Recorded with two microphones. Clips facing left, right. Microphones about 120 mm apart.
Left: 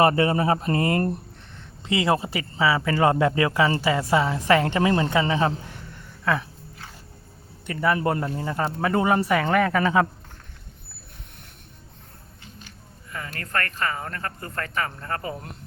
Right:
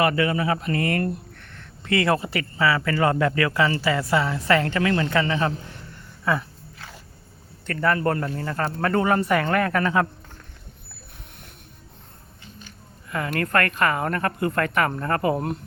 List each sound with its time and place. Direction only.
0.0 s speech: 30° left (ahead or behind)
7.7 s a man's voice: 10° left (ahead or behind)
13.1 s speech: 60° right (ahead or behind)